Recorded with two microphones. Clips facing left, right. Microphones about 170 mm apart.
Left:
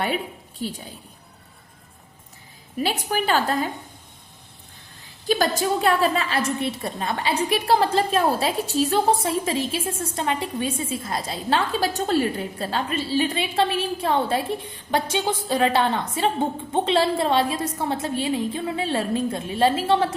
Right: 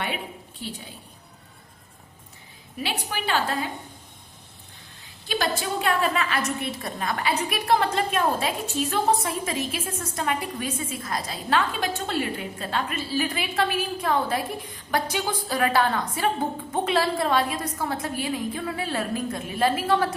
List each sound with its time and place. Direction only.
0.6 s a woman's voice: 45° left (ahead or behind)
2.8 s a woman's voice: 45° left (ahead or behind)
5.3 s a woman's voice: 40° left (ahead or behind)